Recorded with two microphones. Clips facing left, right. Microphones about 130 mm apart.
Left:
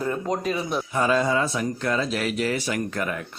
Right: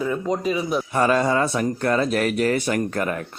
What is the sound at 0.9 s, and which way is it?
Speech, 60° right (ahead or behind).